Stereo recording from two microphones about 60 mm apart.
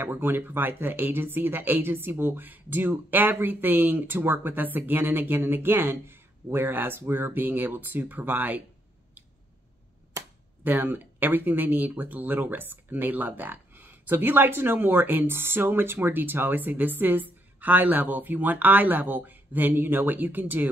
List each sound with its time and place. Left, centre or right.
0.0 s speech: right
10.6 s speech: right